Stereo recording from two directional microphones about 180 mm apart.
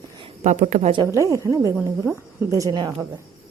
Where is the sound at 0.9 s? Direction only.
20° right (ahead or behind).